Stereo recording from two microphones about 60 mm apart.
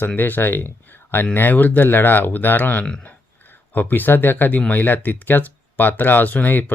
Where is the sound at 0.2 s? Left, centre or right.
Left.